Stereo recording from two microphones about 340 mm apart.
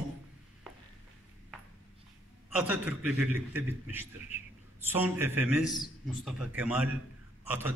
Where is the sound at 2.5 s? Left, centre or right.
Centre.